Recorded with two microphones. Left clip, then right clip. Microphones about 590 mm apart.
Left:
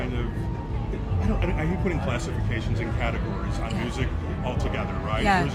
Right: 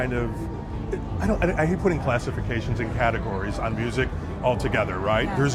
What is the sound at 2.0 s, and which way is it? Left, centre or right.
Speech, right.